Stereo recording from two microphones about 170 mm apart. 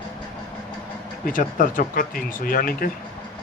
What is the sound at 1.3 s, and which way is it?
Speech, 50° left (ahead or behind).